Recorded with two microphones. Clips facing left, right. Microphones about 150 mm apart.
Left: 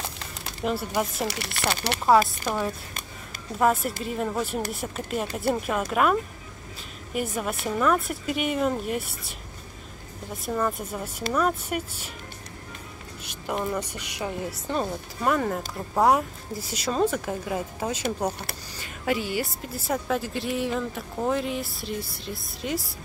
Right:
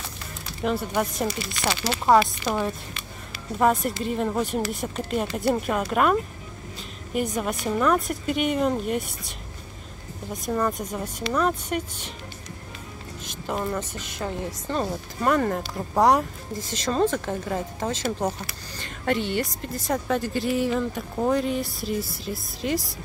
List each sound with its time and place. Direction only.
0.6 s speech: 5° left (ahead or behind)
1.2 s speech: 65° left (ahead or behind)
2.4 s speech: centre (ahead or behind)
7.2 s speech: 5° left (ahead or behind)
10.3 s a woman's voice: 5° left (ahead or behind)
13.2 s a woman's voice: 10° left (ahead or behind)